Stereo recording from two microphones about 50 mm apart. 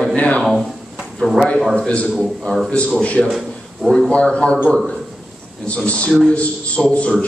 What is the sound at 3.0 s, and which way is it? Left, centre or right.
Speech, left.